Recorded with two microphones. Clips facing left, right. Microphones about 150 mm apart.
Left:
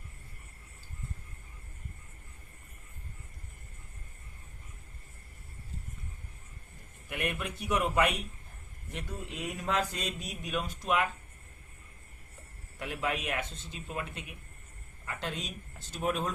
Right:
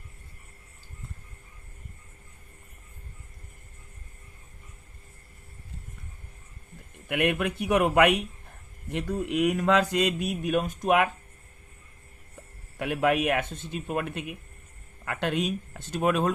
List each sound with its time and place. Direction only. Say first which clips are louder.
7.1 s speech: right 9 dB; 65° right (ahead or behind)
12.8 s speech: right 10 dB; 60° right (ahead or behind)